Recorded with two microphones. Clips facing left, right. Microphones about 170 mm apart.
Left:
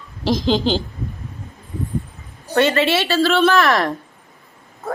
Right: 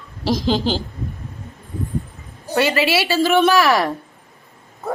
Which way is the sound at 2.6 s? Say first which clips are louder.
Left 2 dB; 5° right (ahead or behind).